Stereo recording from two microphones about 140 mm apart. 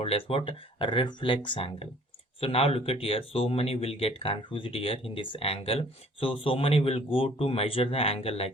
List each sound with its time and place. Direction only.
0.0 s speech: 45° left (ahead or behind)